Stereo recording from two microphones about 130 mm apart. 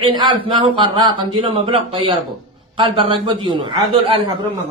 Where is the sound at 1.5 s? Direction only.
45° right (ahead or behind).